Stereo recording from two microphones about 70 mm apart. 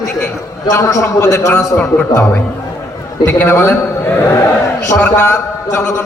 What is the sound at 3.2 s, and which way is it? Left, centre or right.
Speech, left.